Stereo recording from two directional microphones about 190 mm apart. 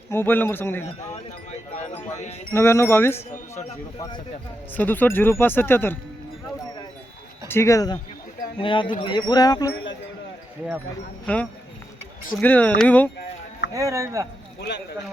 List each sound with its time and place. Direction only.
0.1 s speech: 10° left (ahead or behind)
1.1 s a sound: 35° left (ahead or behind)
2.5 s speech: 15° left (ahead or behind)
4.7 s speech: 10° left (ahead or behind)
7.4 s speech: 15° left (ahead or behind)
11.3 s speech: 5° left (ahead or behind)
13.7 s speech: 15° right (ahead or behind)